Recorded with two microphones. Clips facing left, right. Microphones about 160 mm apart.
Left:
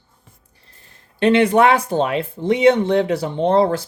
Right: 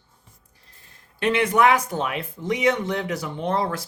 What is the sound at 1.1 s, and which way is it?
Speech, 30° left (ahead or behind).